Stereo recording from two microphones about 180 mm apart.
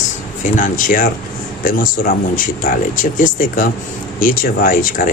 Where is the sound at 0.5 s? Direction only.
50° left (ahead or behind).